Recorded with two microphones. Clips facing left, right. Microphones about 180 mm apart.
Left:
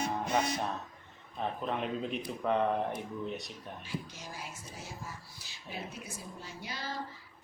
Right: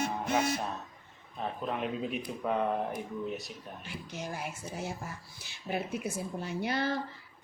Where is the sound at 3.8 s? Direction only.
60° right (ahead or behind).